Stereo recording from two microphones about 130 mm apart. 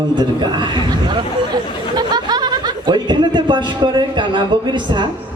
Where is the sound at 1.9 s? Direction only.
30° right (ahead or behind).